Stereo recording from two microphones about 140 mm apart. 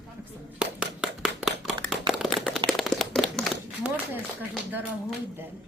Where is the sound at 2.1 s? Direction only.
Centre (ahead or behind).